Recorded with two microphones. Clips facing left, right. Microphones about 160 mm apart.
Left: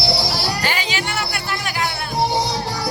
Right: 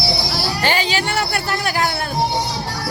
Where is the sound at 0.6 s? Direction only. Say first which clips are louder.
Right 4 dB; 30° right (ahead or behind).